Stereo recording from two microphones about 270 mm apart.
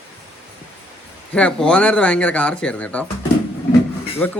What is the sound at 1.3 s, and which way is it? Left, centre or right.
A man's voice, centre.